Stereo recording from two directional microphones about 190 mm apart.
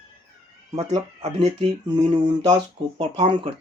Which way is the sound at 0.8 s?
30° right (ahead or behind).